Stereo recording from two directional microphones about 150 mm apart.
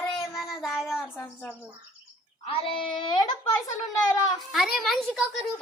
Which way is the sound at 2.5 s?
35° left (ahead or behind).